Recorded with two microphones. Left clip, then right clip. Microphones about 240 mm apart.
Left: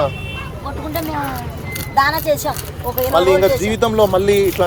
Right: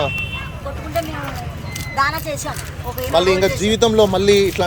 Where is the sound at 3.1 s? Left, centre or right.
Right.